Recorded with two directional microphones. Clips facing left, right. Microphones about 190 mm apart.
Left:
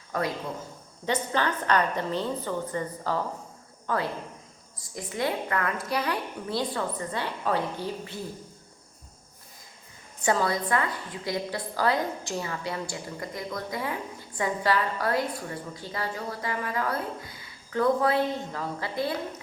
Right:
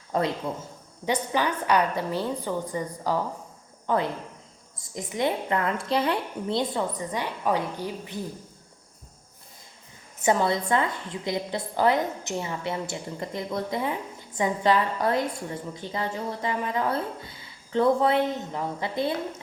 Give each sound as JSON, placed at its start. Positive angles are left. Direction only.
{"t": 0.1, "sound": "a woman's voice", "side_deg": -25}
{"t": 1.0, "sound": "a woman's voice", "side_deg": -10}
{"t": 10.2, "sound": "a woman's voice", "side_deg": -20}